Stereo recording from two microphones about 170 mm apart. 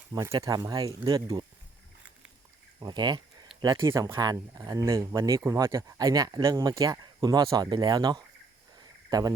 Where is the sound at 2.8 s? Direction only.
25° right (ahead or behind).